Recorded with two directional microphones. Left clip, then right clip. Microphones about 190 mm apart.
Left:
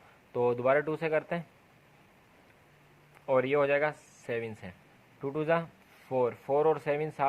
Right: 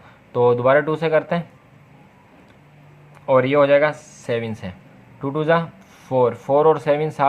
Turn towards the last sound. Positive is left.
turn(degrees=25)  # may be behind; listen again after turning